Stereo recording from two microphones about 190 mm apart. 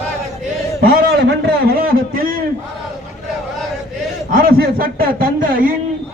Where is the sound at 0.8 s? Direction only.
55° right (ahead or behind).